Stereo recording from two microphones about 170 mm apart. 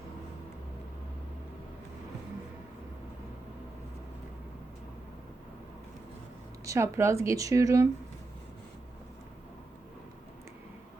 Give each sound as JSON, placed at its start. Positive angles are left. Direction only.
{"t": 6.7, "sound": "speech", "side_deg": -15}